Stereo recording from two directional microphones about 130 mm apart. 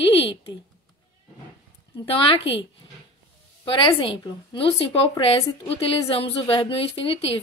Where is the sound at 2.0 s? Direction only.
45° left (ahead or behind).